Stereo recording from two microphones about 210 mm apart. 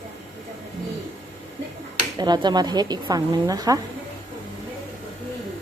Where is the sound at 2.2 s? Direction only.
20° right (ahead or behind).